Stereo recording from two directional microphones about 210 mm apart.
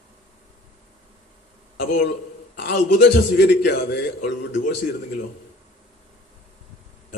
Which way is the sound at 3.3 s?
50° left (ahead or behind).